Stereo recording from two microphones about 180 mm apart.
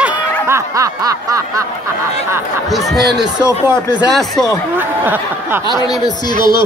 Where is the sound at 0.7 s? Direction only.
20° right (ahead or behind).